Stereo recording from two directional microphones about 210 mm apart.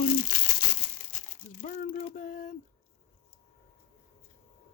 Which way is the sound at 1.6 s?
40° left (ahead or behind).